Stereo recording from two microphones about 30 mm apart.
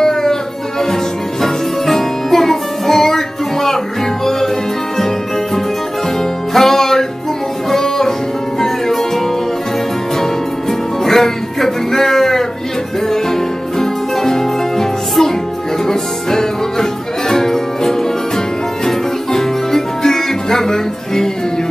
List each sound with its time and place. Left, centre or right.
0.0 s music: centre
6.5 s music: centre
13.7 s music: centre